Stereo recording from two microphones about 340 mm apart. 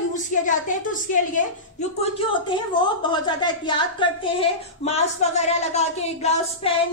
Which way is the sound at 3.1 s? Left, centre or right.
Centre.